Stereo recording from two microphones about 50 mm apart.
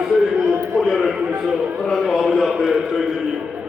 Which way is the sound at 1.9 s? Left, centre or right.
Centre.